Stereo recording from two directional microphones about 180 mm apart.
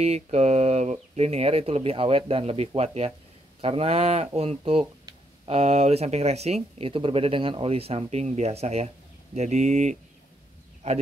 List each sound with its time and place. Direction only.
0.0 s speech: 35° right (ahead or behind)